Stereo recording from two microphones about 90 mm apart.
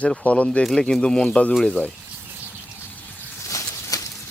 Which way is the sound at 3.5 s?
40° left (ahead or behind).